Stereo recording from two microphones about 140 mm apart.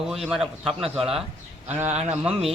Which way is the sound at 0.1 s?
Centre (ahead or behind).